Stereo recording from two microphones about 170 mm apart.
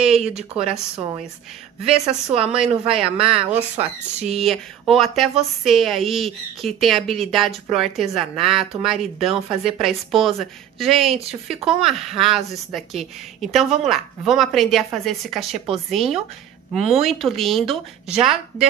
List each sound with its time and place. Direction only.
0.0 s speech: 5° right (ahead or behind)
1.9 s speech: 5° right (ahead or behind)
3.2 s speech: 35° right (ahead or behind)
4.4 s speech: centre (ahead or behind)
11.1 s speech: 35° right (ahead or behind)
11.4 s speech: centre (ahead or behind)